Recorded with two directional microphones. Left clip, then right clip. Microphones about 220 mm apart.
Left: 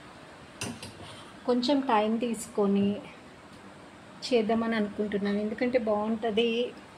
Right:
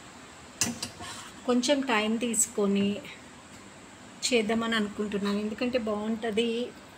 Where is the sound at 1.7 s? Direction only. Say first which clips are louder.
Left 2 dB; 15° left (ahead or behind).